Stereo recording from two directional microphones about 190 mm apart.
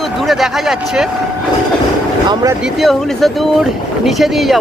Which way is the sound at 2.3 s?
20° right (ahead or behind).